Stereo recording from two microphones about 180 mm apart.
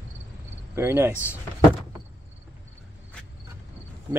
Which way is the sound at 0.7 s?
15° right (ahead or behind).